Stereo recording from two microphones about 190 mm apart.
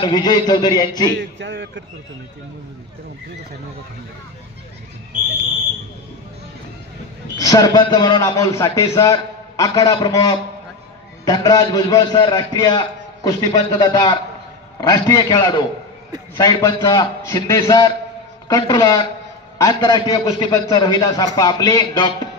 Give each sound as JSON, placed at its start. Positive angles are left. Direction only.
{"t": 0.0, "sound": "a man's voice", "side_deg": 20}
{"t": 1.1, "sound": "a man's voice", "side_deg": -65}
{"t": 7.3, "sound": "a man's voice", "side_deg": 20}